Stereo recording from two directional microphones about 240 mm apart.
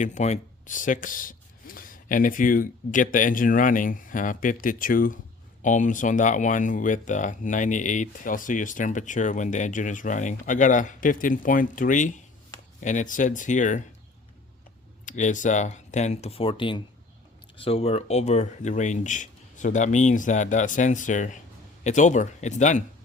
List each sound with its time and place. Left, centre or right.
0.0 s speech: left
15.0 s speech: left